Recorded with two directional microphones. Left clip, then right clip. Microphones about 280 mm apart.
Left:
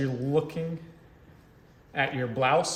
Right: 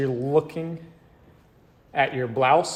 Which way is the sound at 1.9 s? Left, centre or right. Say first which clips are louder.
Right 5 dB; centre.